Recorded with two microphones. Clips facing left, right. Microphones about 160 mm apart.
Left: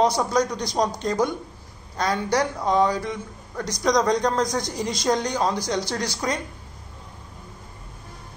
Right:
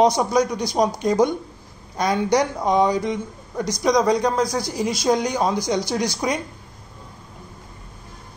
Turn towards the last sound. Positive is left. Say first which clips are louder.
# right 4 dB
turn(degrees=-10)  # may be behind; listen again after turning